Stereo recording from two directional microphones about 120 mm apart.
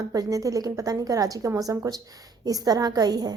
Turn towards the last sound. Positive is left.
turn(degrees=-35)  # may be behind; listen again after turning